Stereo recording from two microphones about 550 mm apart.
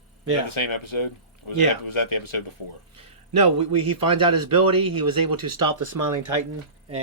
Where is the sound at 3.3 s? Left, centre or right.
Right.